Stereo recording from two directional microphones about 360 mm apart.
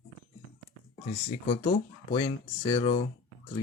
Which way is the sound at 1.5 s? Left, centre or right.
Centre.